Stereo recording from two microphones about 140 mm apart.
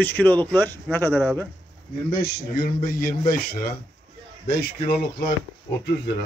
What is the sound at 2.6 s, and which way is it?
A man's voice, 90° left.